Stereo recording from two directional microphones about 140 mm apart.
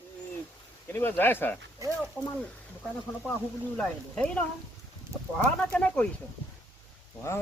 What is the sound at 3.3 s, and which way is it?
Speech, 10° left (ahead or behind).